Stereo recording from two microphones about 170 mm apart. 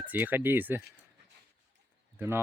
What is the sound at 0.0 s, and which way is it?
Speech, 10° right (ahead or behind).